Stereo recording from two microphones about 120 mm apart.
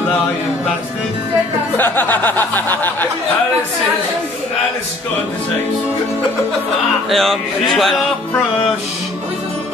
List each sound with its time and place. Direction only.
1.8 s chuckle: 15° left (ahead or behind)
7.1 s music: centre (ahead or behind)